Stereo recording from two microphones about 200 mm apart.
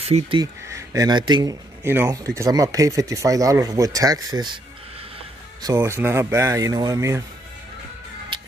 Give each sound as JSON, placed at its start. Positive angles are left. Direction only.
{"t": 0.0, "sound": "speech", "side_deg": -25}
{"t": 0.7, "sound": "speech", "side_deg": -15}
{"t": 5.6, "sound": "speech", "side_deg": -15}